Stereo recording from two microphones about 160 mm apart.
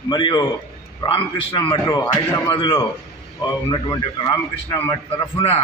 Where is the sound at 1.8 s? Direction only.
20° left (ahead or behind).